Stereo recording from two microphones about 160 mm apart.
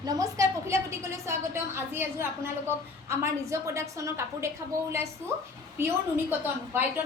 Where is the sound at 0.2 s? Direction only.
20° right (ahead or behind).